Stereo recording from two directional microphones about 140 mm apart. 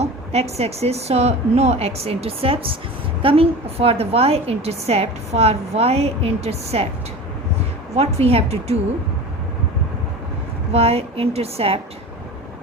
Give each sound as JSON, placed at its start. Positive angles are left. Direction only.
{"t": 0.0, "sound": "a woman's voice", "side_deg": -50}
{"t": 7.9, "sound": "a woman's voice", "side_deg": -45}
{"t": 10.7, "sound": "a woman's voice", "side_deg": -45}